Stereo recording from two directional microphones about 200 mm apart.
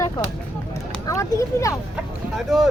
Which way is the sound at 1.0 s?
15° left (ahead or behind).